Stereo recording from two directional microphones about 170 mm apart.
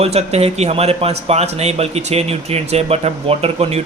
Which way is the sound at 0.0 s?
40° right (ahead or behind).